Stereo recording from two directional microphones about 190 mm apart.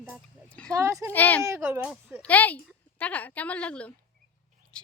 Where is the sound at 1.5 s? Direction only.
10° right (ahead or behind).